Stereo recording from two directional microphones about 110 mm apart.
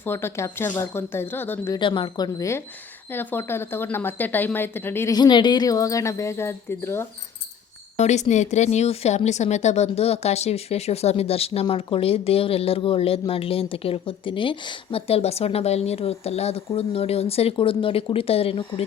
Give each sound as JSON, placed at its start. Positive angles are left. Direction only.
{"t": 0.0, "sound": "speech", "side_deg": 20}
{"t": 1.8, "sound": "speech", "side_deg": 45}
{"t": 3.1, "sound": "speech", "side_deg": 20}
{"t": 5.1, "sound": "speech", "side_deg": 40}
{"t": 7.9, "sound": "speech", "side_deg": 90}